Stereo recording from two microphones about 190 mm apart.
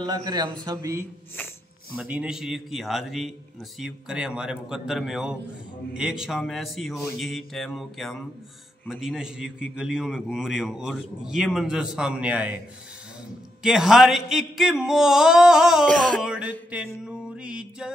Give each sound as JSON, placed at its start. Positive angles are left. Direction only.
{"t": 0.0, "sound": "a man's voice", "side_deg": -20}
{"t": 2.0, "sound": "a man's voice", "side_deg": -5}
{"t": 13.6, "sound": "a man's voice", "side_deg": 0}
{"t": 17.0, "sound": "music", "side_deg": -5}